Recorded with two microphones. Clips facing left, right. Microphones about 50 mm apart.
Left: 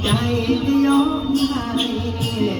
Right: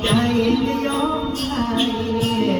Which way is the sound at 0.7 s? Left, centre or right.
Centre.